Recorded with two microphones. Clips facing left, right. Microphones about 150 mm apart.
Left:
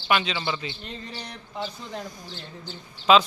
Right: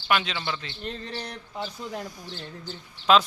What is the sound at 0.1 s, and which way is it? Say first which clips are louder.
Speech: left 2 dB; centre (ahead or behind).